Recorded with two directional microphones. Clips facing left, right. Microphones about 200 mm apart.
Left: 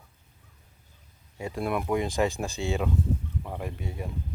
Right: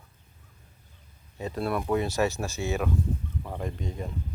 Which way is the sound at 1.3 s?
10° left (ahead or behind).